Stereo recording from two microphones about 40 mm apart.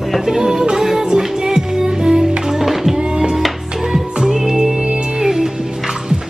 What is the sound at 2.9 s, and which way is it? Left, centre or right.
Music, right.